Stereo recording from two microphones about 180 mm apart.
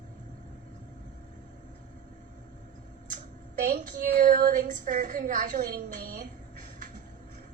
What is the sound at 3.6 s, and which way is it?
A woman's voice, 55° right (ahead or behind).